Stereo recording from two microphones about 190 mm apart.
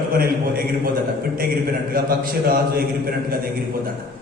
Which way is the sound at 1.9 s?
50° right (ahead or behind).